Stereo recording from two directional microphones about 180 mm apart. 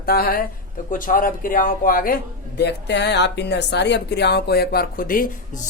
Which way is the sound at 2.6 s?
65° left (ahead or behind).